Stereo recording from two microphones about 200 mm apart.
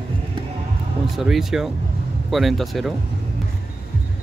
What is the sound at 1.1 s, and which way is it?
Speech, centre (ahead or behind).